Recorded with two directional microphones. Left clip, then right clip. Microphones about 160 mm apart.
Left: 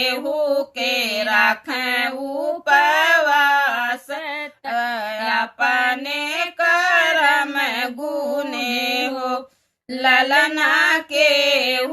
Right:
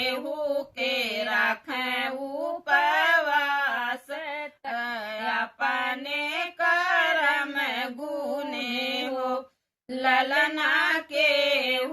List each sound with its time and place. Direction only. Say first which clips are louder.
0.3 s mantra: left 9 dB; 40° left (ahead or behind)
2.6 s female singing: left 7 dB; 40° left (ahead or behind)
4.2 s female singing: left 6 dB; 15° left (ahead or behind)
4.7 s a sound: left 9 dB; 40° left (ahead or behind)
5.5 s female singing: left 9 dB; 40° left (ahead or behind)